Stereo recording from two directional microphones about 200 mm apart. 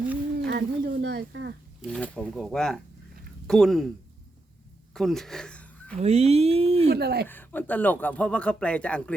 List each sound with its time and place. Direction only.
0.3 s speech: 55° right (ahead or behind)
1.8 s speech: 5° left (ahead or behind)
4.9 s speech: centre (ahead or behind)
6.0 s speech: 30° right (ahead or behind)
6.9 s speech: 50° right (ahead or behind)
7.3 s speech: 10° left (ahead or behind)